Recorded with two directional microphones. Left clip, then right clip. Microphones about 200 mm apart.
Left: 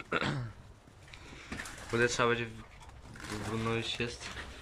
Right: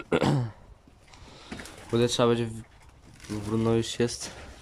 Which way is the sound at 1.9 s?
20° right (ahead or behind).